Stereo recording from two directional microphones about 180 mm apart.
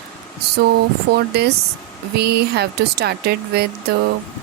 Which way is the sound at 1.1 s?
65° right (ahead or behind).